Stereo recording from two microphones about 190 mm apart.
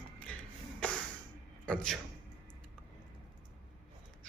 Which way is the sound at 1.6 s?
5° left (ahead or behind).